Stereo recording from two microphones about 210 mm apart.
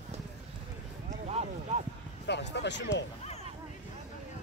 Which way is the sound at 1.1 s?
30° right (ahead or behind).